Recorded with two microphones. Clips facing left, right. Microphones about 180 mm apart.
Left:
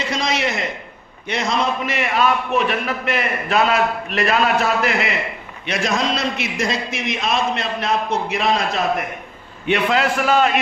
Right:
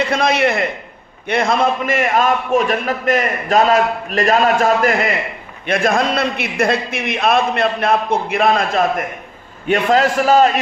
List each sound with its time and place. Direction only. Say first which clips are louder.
0.0 s a man's voice: right 6 dB; 55° right (ahead or behind); by 10.6 s 40° right (ahead or behind)